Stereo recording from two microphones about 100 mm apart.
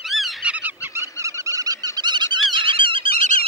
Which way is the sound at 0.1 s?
Centre (ahead or behind).